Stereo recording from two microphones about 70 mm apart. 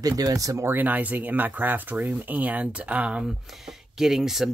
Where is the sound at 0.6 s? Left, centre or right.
Right.